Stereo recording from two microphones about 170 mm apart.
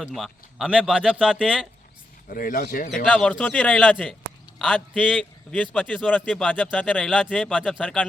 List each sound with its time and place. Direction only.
0.0 s speech: centre (ahead or behind)
2.3 s speech: 55° left (ahead or behind)
2.9 s speech: 5° left (ahead or behind)